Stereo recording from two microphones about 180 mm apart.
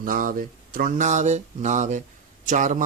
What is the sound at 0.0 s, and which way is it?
Speech, 50° right (ahead or behind).